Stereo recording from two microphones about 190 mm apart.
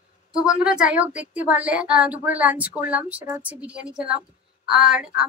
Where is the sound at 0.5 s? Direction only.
5° right (ahead or behind).